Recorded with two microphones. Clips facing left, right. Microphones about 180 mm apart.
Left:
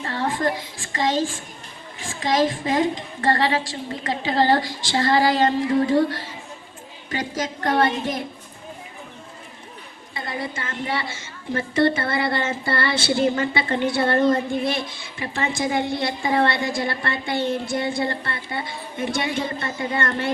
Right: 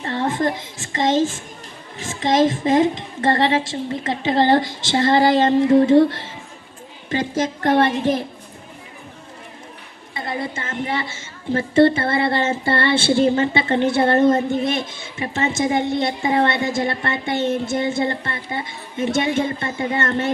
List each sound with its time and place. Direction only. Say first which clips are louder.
0.0 s a woman's voice: right 3 dB; 25° right (ahead or behind)
10.2 s a woman's voice: right 3 dB; 25° right (ahead or behind)